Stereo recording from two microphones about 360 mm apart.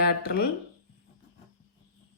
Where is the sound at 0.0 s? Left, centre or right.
Left.